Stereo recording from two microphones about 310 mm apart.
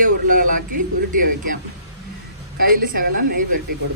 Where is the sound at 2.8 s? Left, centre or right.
Right.